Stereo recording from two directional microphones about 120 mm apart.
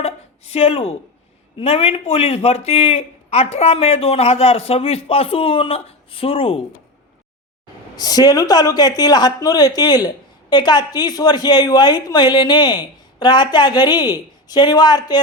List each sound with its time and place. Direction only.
0.0 s a sound: 55° left (ahead or behind)
1.5 s a man's voice: 55° left (ahead or behind)
7.9 s a woman's voice: 35° left (ahead or behind)